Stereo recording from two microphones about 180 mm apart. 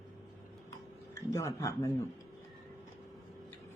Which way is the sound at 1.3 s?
15° left (ahead or behind).